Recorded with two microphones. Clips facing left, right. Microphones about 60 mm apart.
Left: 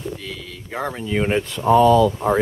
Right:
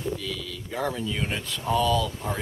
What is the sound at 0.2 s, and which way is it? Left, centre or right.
Speech, left.